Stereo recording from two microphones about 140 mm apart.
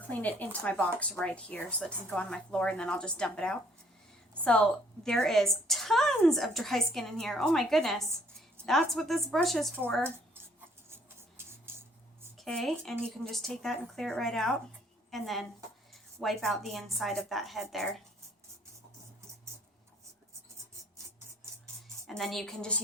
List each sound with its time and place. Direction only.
0.1 s a woman's voice: 10° left (ahead or behind)
10.9 s a sound: 15° right (ahead or behind)
12.4 s a woman's voice: 5° left (ahead or behind)
22.0 s a woman's voice: centre (ahead or behind)